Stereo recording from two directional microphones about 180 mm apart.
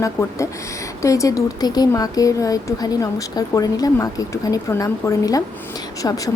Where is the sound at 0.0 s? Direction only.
15° left (ahead or behind).